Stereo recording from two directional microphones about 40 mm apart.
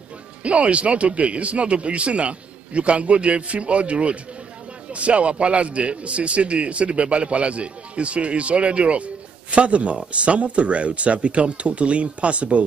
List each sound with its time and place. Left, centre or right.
0.4 s a man's voice: right